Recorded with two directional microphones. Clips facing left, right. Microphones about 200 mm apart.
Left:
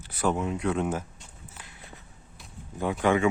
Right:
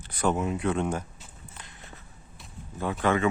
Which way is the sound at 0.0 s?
5° left (ahead or behind).